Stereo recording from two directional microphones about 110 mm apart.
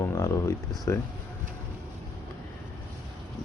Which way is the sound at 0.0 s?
30° left (ahead or behind).